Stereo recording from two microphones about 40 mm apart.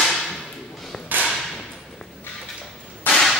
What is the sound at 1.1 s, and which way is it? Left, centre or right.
Whip, right.